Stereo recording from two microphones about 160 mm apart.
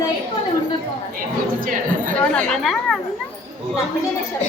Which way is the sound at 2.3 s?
Centre (ahead or behind).